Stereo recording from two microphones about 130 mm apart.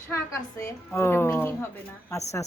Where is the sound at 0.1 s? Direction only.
25° left (ahead or behind).